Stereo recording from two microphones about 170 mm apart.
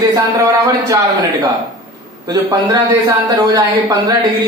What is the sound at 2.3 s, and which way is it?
Speech, 20° right (ahead or behind).